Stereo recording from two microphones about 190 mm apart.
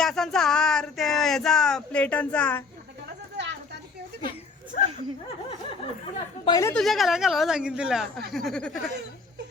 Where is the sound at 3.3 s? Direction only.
65° right (ahead or behind).